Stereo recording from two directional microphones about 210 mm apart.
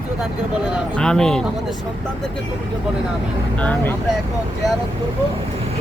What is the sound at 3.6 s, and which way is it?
Speech, 5° left (ahead or behind).